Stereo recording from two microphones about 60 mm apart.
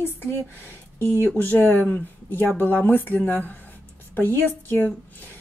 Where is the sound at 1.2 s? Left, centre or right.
Left.